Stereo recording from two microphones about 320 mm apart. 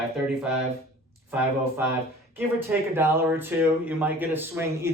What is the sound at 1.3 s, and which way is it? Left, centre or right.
Speech, centre.